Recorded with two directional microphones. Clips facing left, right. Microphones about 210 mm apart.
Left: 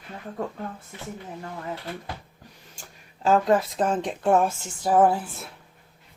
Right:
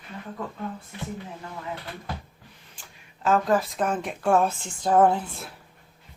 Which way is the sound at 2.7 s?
40° left (ahead or behind).